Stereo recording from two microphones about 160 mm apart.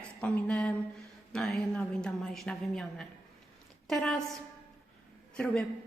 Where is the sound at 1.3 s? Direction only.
Centre (ahead or behind).